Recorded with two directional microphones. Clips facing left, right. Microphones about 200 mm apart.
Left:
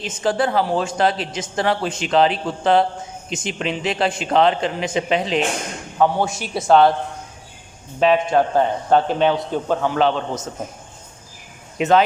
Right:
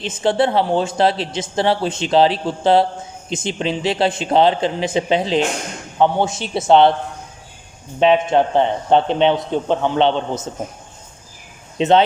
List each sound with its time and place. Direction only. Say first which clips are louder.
0.0 s a man's voice: right 3 dB; 30° right (ahead or behind)
7.9 s a man's voice: right 2 dB; 25° right (ahead or behind)
11.8 s a man's voice: right 2 dB; 30° right (ahead or behind)